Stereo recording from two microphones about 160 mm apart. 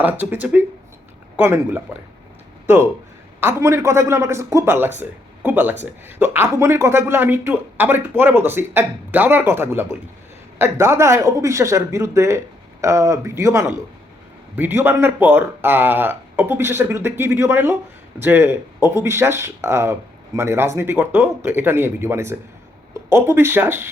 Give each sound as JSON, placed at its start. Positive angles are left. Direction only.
{"t": 0.0, "sound": "speech", "side_deg": -10}
{"t": 3.4, "sound": "speech", "side_deg": -15}